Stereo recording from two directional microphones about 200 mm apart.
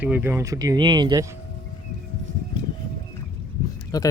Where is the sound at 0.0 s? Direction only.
10° right (ahead or behind).